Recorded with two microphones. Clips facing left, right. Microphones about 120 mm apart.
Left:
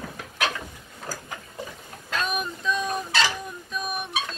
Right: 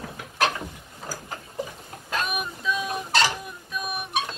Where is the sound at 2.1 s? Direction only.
5° right (ahead or behind).